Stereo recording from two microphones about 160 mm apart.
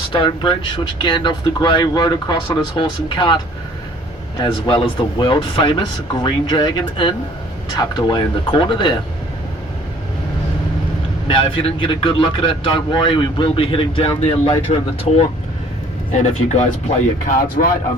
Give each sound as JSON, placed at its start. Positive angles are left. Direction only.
{"t": 0.1, "sound": "speech", "side_deg": 30}
{"t": 4.4, "sound": "speech", "side_deg": 30}
{"t": 11.3, "sound": "speech", "side_deg": 30}
{"t": 16.1, "sound": "speech", "side_deg": 45}
{"t": 17.2, "sound": "speech", "side_deg": 60}